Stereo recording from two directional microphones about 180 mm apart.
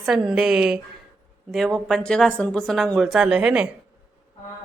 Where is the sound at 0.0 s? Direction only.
Centre (ahead or behind).